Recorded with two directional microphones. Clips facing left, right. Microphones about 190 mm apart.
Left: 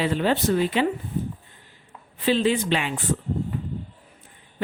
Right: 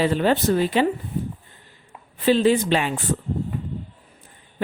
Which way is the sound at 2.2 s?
45° right (ahead or behind).